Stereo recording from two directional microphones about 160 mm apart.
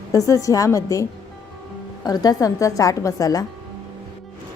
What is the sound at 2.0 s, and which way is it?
A woman's voice, 25° left (ahead or behind).